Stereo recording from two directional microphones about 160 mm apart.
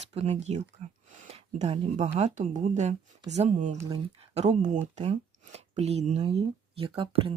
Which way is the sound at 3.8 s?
35° right (ahead or behind).